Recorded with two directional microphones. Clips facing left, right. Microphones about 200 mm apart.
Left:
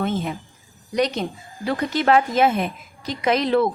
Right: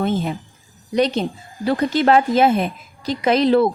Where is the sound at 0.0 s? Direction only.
35° right (ahead or behind).